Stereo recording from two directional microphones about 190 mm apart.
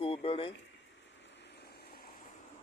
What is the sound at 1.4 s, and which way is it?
Vehicle, 55° left (ahead or behind).